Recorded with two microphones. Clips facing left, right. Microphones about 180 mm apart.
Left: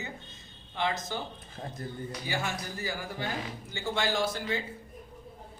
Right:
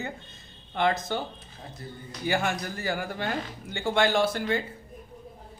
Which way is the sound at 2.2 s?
60° right (ahead or behind).